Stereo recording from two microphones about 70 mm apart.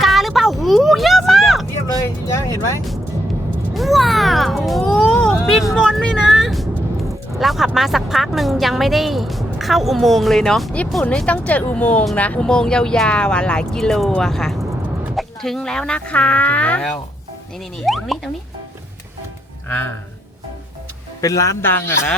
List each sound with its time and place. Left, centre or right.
0.0 s a sound: centre
2.2 s vehicle: left
3.8 s cat: centre
6.3 s vehicle: centre
7.3 s speech: centre
11.3 s speech: left
17.8 s speech: centre
19.6 s speech: left
21.2 s a man's voice: left
21.6 s speech: left